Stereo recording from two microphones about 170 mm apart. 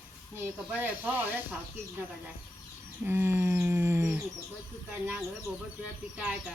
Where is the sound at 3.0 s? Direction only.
15° right (ahead or behind).